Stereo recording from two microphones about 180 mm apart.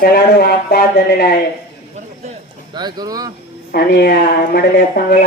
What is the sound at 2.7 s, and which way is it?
Speech, 25° right (ahead or behind).